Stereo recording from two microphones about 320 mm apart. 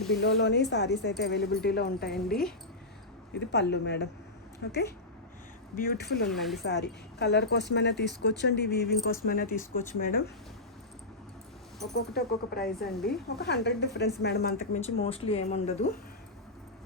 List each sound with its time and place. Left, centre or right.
0.2 s speech: left
2.0 s speech: centre
3.3 s speech: left
6.2 s speech: centre
6.6 s speech: left
11.9 s speech: left